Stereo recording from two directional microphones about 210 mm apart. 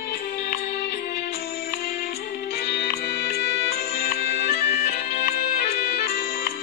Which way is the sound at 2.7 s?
50° left (ahead or behind).